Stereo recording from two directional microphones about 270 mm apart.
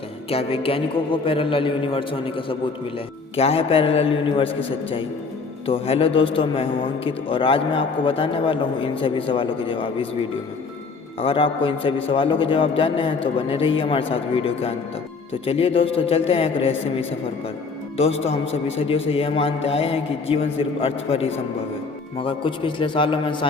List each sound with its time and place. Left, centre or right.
0.3 s a man's voice: left